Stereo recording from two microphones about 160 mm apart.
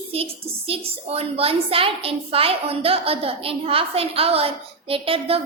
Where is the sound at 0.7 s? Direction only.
40° right (ahead or behind).